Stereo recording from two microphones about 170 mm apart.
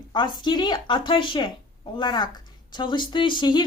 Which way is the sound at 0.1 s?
25° left (ahead or behind).